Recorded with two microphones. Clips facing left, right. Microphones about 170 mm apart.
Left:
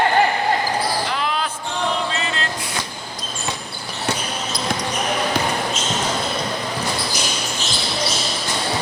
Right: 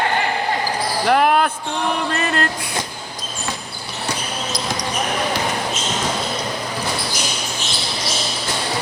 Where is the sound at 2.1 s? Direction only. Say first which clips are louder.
Right 5 dB; 55° right (ahead or behind).